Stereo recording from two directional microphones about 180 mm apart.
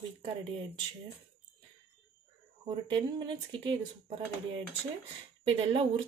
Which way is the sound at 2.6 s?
25° right (ahead or behind).